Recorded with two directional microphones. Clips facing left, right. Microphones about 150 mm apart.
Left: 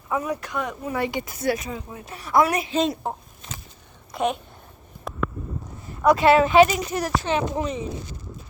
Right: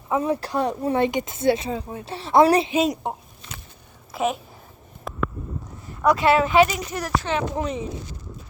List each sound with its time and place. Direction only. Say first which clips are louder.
0.1 s speech: right 4 dB; 30° right (ahead or behind)
2.7 s a woman's voice: right 1 dB; 10° right (ahead or behind)
5.1 s a sound: even; centre (ahead or behind)
6.1 s speech: left 2 dB; 25° left (ahead or behind)
7.5 s speech: even; 5° right (ahead or behind)